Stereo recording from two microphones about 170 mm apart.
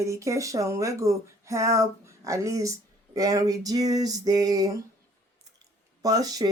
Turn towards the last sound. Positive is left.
turn(degrees=-20)  # may be behind; listen again after turning